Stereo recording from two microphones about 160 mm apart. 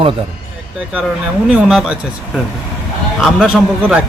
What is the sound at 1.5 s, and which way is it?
A man's voice, 5° right (ahead or behind).